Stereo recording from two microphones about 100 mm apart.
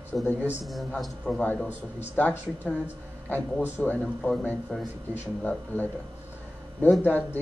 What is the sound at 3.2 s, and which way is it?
Speech, 15° left (ahead or behind).